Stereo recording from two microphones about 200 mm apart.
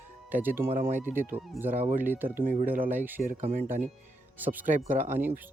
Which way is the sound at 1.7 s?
40° right (ahead or behind).